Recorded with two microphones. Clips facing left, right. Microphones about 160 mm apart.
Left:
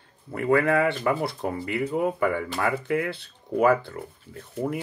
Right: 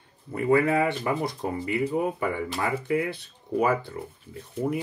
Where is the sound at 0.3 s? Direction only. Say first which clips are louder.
Even; 25° right (ahead or behind).